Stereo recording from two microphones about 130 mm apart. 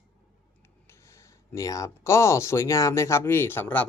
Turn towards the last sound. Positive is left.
turn(degrees=15)  # may be behind; listen again after turning